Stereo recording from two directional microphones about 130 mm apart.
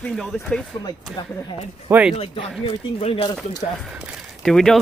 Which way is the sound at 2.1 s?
45° left (ahead or behind).